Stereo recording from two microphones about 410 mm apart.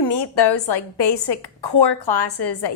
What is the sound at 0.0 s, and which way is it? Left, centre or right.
A woman's voice, left.